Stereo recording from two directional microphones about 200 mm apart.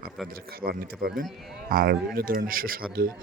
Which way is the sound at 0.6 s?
45° right (ahead or behind).